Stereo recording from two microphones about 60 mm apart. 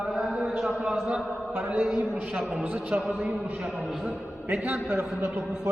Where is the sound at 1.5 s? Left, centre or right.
Right.